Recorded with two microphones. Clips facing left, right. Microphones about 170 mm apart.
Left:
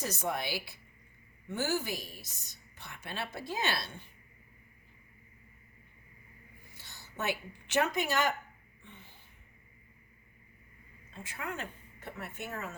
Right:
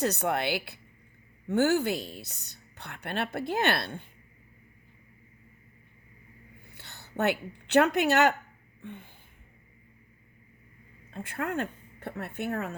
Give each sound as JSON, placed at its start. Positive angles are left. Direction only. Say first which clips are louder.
{"t": 0.0, "sound": "a woman's voice", "louder": "right 7 dB", "side_deg": -65}
{"t": 6.7, "sound": "a woman's voice", "louder": "right 4 dB", "side_deg": -65}
{"t": 8.8, "sound": "a sound", "louder": "right 12 dB", "side_deg": -55}
{"t": 11.1, "sound": "speech", "louder": "right 8 dB", "side_deg": -55}